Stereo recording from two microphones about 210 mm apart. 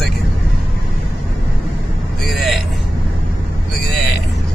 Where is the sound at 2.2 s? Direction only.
Centre (ahead or behind).